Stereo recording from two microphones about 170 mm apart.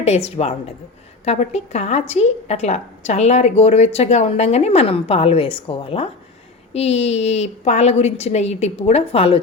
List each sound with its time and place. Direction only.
0.0 s a woman's voice: 40° left (ahead or behind)